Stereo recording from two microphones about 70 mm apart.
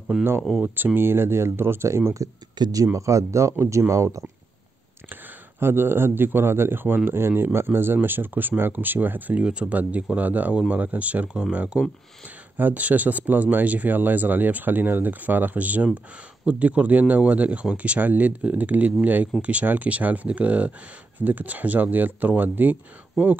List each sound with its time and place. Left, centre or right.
0.1 s speech: centre
0.7 s speech: right
5.1 s speech: right
9.4 s speech: centre
23.2 s speech: centre